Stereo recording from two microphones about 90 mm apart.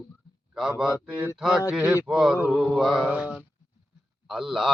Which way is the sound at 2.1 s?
5° right (ahead or behind).